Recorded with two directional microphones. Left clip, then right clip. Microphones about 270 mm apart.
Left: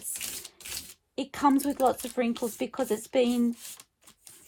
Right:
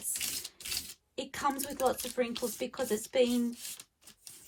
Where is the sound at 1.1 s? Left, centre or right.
Left.